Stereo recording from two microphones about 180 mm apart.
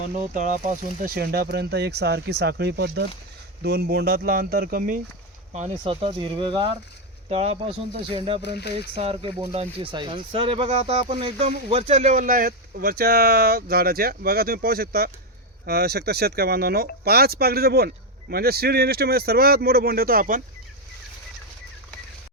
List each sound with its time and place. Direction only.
0.3 s speech: 45° right (ahead or behind)
5.5 s speech: 35° right (ahead or behind)
8.4 s speech: 65° left (ahead or behind)
9.0 s speech: 35° right (ahead or behind)
10.7 s speech: 40° right (ahead or behind)